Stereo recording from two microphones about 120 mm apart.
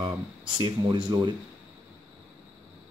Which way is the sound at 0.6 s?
40° right (ahead or behind).